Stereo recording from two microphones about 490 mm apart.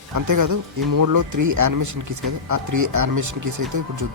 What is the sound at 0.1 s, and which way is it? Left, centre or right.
Speech, right.